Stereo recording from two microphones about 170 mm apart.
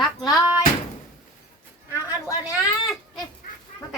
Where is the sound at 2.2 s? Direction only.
5° right (ahead or behind).